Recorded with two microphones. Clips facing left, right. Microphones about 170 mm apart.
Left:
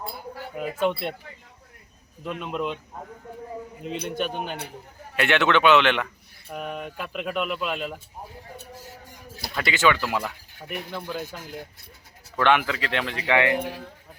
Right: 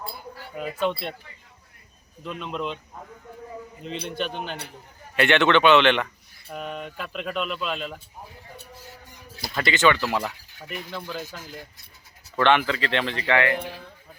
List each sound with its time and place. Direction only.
0.5 s speech: 10° left (ahead or behind)
2.4 s speech: 10° left (ahead or behind)
3.8 s a man's voice: 10° left (ahead or behind)
8.7 s a sound: 45° left (ahead or behind)
9.6 s speech: 5° left (ahead or behind)
10.7 s speech: 55° left (ahead or behind)
10.9 s speech: 10° left (ahead or behind)
11.2 s speech: 55° left (ahead or behind)
12.4 s speech: 5° left (ahead or behind)